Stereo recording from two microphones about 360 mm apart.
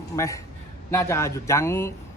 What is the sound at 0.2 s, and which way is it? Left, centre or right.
A man's voice, centre.